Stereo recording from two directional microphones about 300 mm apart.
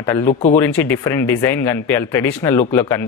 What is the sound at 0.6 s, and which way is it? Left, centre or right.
Speech, centre.